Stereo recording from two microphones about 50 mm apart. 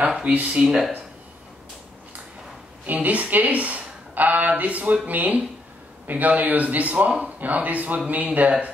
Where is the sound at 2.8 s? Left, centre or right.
Right.